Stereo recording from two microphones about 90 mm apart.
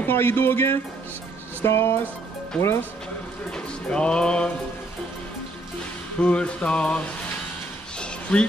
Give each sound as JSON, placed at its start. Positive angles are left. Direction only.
{"t": 0.0, "sound": "speech", "side_deg": 25}
{"t": 3.5, "sound": "music", "side_deg": 10}
{"t": 6.2, "sound": "mantra", "side_deg": 10}
{"t": 8.0, "sound": "a sound", "side_deg": 10}